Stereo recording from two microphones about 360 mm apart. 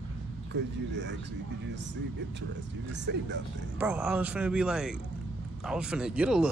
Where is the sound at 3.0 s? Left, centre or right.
Right.